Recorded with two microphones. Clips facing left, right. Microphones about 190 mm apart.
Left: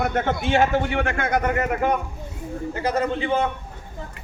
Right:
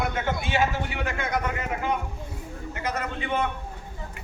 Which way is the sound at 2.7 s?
30° left (ahead or behind).